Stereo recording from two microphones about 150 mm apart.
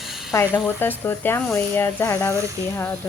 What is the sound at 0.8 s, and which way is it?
Speech, 15° left (ahead or behind).